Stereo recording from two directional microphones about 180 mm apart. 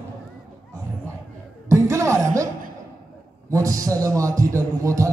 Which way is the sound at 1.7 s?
15° right (ahead or behind).